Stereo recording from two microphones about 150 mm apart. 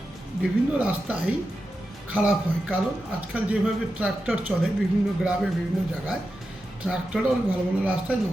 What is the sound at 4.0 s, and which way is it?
Speech, 5° right (ahead or behind).